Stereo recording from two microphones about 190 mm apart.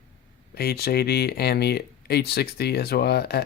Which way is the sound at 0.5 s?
55° left (ahead or behind).